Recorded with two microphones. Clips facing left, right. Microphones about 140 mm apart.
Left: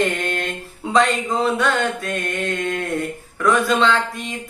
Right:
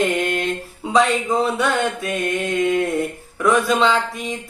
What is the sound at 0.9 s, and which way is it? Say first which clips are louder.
Mantra: right 1 dB; 5° right (ahead or behind).